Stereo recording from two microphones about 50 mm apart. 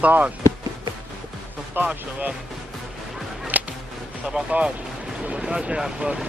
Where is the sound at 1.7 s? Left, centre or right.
Right.